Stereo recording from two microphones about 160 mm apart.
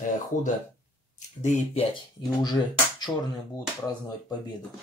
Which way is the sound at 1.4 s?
45° left (ahead or behind).